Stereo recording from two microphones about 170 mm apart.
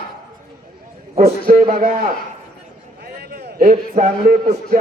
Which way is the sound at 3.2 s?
70° right (ahead or behind).